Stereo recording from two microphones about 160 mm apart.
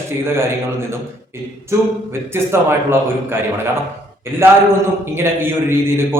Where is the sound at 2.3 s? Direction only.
15° right (ahead or behind).